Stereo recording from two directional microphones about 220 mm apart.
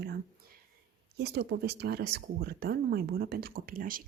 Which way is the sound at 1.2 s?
50° right (ahead or behind).